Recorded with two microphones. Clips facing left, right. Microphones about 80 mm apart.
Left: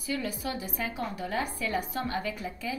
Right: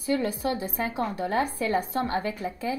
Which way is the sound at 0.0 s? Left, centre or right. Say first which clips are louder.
Right 7 dB; right.